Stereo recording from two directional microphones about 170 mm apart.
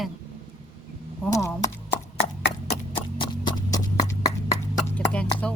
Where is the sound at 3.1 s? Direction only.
25° left (ahead or behind); by 5.3 s 10° left (ahead or behind).